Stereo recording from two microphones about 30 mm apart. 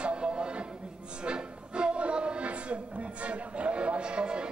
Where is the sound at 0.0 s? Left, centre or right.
Right.